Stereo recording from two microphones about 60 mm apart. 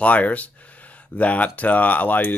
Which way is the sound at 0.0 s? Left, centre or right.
Left.